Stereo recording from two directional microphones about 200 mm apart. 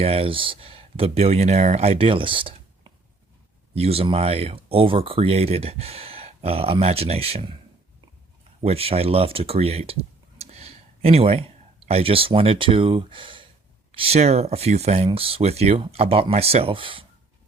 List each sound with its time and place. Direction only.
0.0 s speech: 30° right (ahead or behind)
8.6 s speech: 30° right (ahead or behind)